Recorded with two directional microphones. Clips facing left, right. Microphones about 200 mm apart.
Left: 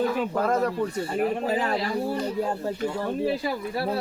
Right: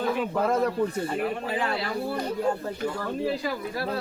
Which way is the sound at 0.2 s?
5° right (ahead or behind).